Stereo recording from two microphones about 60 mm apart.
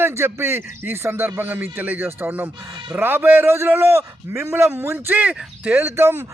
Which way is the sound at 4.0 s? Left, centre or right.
Right.